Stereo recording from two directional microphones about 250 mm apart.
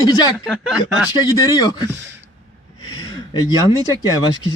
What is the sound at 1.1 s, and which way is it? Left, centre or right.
Speech, centre.